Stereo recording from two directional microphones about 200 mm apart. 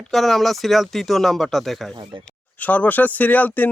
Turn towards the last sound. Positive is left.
turn(degrees=10)  # may be behind; listen again after turning